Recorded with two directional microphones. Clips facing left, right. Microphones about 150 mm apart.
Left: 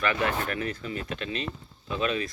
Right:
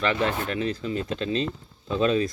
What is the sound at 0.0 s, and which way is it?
Speech, 25° right (ahead or behind).